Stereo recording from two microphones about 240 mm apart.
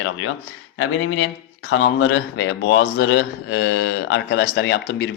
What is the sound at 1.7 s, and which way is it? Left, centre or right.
Speech, left.